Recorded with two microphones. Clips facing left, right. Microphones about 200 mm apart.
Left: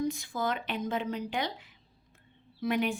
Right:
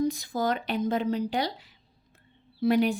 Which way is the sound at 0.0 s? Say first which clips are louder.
Right 4 dB; 40° right (ahead or behind).